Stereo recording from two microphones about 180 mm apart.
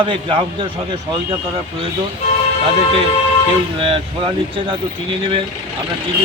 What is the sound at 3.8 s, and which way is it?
Speech, 30° right (ahead or behind).